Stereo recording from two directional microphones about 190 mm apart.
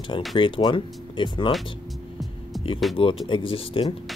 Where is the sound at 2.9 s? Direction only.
Centre (ahead or behind).